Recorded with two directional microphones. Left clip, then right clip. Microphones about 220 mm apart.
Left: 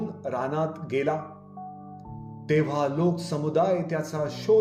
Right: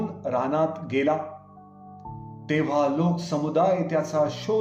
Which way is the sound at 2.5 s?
45° left (ahead or behind).